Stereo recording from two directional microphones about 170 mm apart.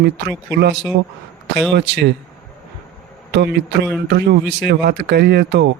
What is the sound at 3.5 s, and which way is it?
Speech, 80° right.